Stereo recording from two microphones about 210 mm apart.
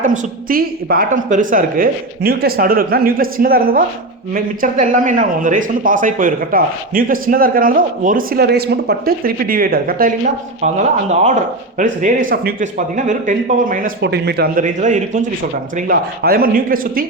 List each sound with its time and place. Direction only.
0.0 s a woman's voice: 40° right (ahead or behind)
11.1 s a woman's voice: 30° right (ahead or behind)